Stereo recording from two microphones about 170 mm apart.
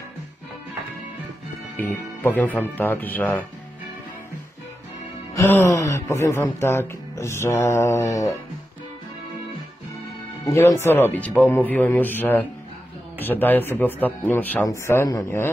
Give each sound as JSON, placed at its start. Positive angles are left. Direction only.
{"t": 1.8, "sound": "speech", "side_deg": 10}
{"t": 5.3, "sound": "speech", "side_deg": 15}
{"t": 10.4, "sound": "speech", "side_deg": 20}